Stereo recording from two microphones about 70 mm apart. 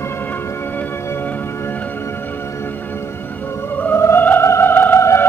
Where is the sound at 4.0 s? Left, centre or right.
Left.